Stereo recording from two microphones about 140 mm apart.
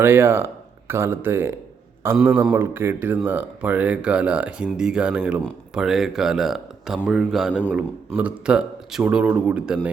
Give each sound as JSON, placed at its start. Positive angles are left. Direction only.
{"t": 0.0, "sound": "speech", "side_deg": -15}